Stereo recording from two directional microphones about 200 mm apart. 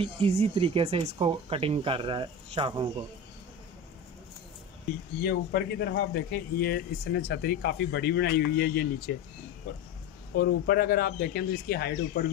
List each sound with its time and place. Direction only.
0.0 s speech: 30° right (ahead or behind)
5.2 s speech: 50° left (ahead or behind)
10.3 s speech: 50° left (ahead or behind)